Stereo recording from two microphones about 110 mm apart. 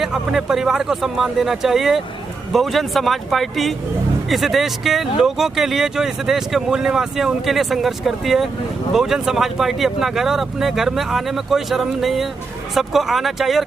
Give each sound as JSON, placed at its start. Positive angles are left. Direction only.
{"t": 0.0, "sound": "speech", "side_deg": -5}